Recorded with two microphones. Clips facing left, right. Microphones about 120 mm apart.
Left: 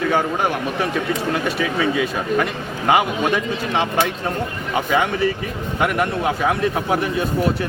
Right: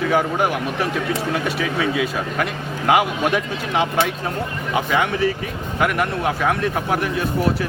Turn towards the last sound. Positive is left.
turn(degrees=0)  # may be behind; listen again after turning